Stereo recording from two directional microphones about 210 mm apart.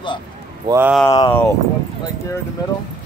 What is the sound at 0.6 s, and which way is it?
Speech, 15° right (ahead or behind).